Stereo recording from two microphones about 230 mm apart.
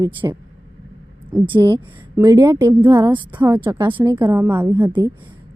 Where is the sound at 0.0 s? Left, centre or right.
Centre.